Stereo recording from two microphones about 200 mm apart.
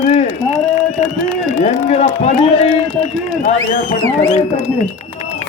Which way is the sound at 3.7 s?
45° left (ahead or behind).